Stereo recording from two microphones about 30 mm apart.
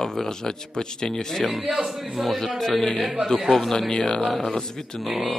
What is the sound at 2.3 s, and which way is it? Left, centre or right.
Speech, centre.